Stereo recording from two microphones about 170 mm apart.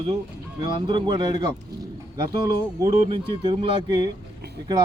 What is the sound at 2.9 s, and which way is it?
Speech, 35° right (ahead or behind).